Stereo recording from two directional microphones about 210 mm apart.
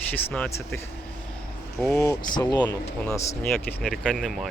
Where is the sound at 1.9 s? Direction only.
15° left (ahead or behind).